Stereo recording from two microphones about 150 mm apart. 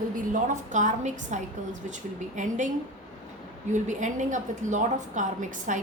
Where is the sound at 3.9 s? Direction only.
55° right (ahead or behind).